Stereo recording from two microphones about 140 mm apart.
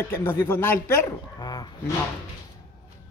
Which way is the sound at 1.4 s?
30° left (ahead or behind).